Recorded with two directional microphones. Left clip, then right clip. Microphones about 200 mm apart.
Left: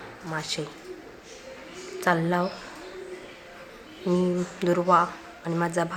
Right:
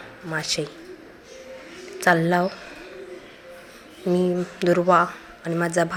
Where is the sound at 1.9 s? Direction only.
15° right (ahead or behind).